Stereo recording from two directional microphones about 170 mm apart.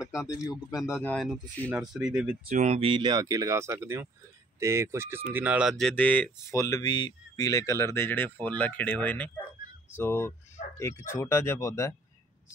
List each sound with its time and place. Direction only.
0.1 s speech: 20° left (ahead or behind)
1.8 s speech: 5° right (ahead or behind)
2.4 s speech: 50° right (ahead or behind); by 11.9 s 15° left (ahead or behind)